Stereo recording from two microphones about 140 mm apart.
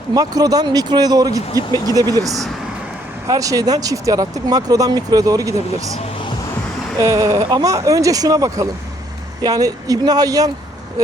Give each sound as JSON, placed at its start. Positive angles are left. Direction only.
{"t": 0.1, "sound": "speech", "side_deg": -25}
{"t": 7.0, "sound": "speech", "side_deg": -25}